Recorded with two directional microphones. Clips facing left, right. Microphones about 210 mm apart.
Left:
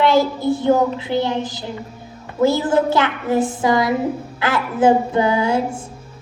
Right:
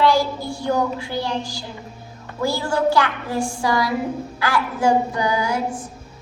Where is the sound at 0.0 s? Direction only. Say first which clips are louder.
Left 3 dB; 20° left (ahead or behind).